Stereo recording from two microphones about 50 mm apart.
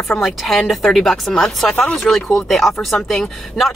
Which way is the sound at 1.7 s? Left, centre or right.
Left.